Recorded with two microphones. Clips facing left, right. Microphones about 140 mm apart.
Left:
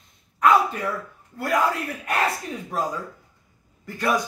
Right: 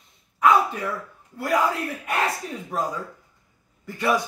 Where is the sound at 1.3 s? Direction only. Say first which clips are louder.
Right 1 dB; 5° right (ahead or behind).